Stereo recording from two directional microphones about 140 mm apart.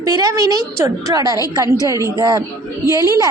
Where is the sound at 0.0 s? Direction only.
25° right (ahead or behind).